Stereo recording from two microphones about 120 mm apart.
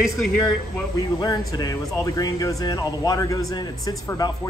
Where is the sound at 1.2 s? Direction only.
35° left (ahead or behind).